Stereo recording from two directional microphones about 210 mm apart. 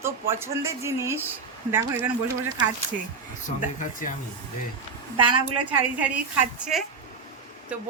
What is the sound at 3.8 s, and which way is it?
Speech, 40° left (ahead or behind).